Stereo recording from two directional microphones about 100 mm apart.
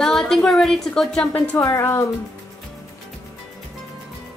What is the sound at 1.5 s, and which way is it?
Speech, 30° left (ahead or behind).